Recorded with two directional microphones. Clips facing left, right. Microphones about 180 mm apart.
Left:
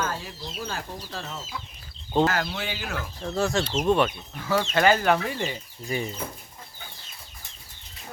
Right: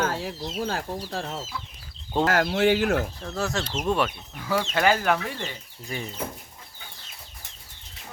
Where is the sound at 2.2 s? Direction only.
80° right.